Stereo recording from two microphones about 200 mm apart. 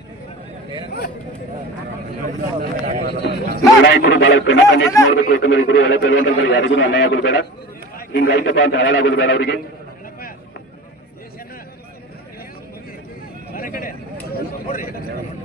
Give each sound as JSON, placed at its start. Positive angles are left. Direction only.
{"t": 2.2, "sound": "speech", "side_deg": -45}
{"t": 3.2, "sound": "a man's voice", "side_deg": 50}
{"t": 5.2, "sound": "speech", "side_deg": 40}
{"t": 5.7, "sound": "a man's voice", "side_deg": 75}
{"t": 8.6, "sound": "a man's voice", "side_deg": 65}
{"t": 13.6, "sound": "speech", "side_deg": 45}